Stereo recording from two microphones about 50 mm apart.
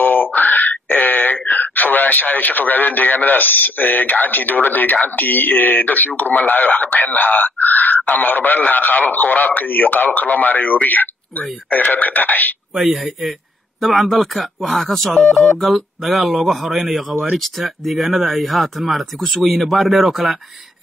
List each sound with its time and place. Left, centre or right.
0.0 s a sound: left
4.9 s speech: left
12.7 s speech: centre